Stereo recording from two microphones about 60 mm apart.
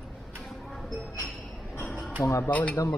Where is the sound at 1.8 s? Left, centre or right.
Centre.